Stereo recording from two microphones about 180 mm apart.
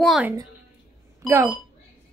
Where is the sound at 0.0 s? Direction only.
Centre (ahead or behind).